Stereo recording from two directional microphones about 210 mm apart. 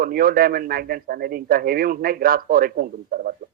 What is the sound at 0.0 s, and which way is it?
A man's voice, 45° right (ahead or behind).